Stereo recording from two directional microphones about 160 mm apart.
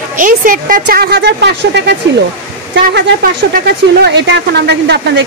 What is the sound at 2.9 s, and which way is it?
A woman's voice, 90° right.